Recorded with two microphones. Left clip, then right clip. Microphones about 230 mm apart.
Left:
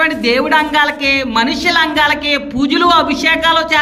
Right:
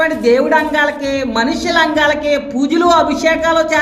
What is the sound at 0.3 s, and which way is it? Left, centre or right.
A woman's voice, centre.